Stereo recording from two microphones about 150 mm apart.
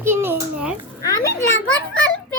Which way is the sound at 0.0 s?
15° right (ahead or behind).